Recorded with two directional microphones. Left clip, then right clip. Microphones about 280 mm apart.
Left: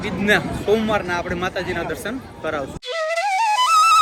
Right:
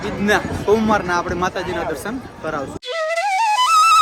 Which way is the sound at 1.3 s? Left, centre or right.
Centre.